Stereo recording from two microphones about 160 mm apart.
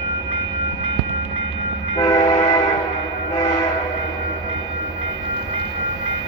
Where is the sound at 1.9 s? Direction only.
25° left (ahead or behind).